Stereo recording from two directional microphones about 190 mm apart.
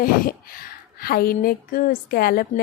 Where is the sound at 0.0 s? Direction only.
50° left (ahead or behind).